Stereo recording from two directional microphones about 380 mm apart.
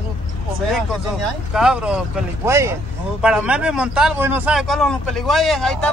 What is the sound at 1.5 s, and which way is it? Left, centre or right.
Speech, centre.